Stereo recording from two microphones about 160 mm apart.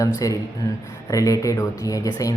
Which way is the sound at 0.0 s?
20° left (ahead or behind).